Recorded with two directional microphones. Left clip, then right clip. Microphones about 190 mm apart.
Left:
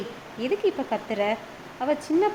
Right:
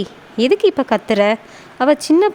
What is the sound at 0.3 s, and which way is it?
Speech, 65° right (ahead or behind).